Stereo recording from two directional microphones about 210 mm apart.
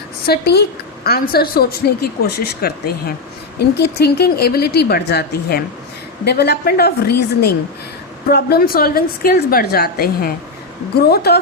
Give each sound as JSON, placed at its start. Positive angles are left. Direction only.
{"t": 0.3, "sound": "a woman's voice", "side_deg": 50}